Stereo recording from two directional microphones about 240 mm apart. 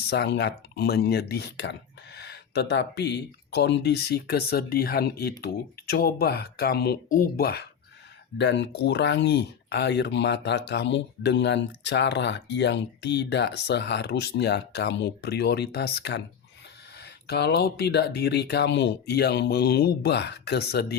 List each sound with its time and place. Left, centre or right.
0.1 s speech: left
17.2 s speech: left